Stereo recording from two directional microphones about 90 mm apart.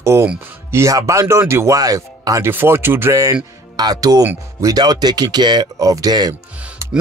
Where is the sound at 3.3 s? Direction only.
45° right (ahead or behind).